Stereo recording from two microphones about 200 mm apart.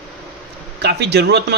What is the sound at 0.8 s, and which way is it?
Speech, 55° right (ahead or behind).